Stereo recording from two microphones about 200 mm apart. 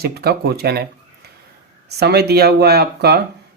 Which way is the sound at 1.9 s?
55° right (ahead or behind).